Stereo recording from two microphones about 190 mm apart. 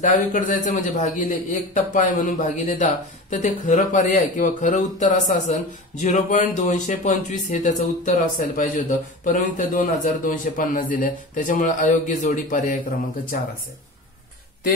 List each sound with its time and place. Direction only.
0.0 s a man's voice: 40° left (ahead or behind)